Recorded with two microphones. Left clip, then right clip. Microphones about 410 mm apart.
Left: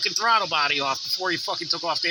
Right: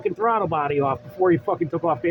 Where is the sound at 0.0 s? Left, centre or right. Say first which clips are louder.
Even; right.